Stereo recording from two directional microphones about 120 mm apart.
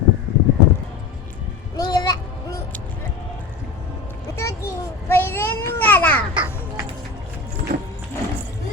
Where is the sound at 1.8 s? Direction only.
30° left (ahead or behind).